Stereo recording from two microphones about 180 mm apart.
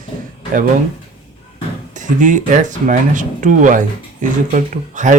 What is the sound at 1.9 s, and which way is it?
Speech, 45° right (ahead or behind).